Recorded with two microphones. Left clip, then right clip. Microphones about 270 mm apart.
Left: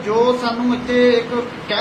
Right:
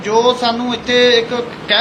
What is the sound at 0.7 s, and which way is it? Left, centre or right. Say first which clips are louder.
Speech: right 2 dB; right.